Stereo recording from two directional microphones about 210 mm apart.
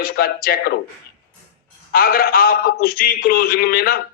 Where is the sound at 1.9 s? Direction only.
45° left (ahead or behind).